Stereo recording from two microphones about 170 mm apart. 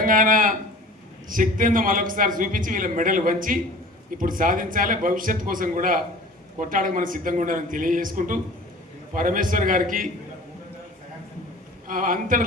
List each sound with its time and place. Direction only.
0.0 s a man's voice: 55° right (ahead or behind)
11.9 s a man's voice: 55° right (ahead or behind)